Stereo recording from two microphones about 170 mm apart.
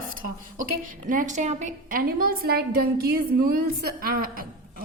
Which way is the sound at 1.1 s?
45° right (ahead or behind).